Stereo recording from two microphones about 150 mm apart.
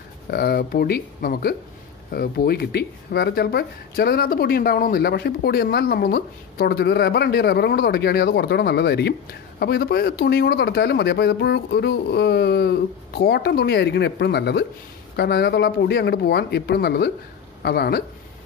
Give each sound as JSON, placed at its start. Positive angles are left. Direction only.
{"t": 0.3, "sound": "speech", "side_deg": 90}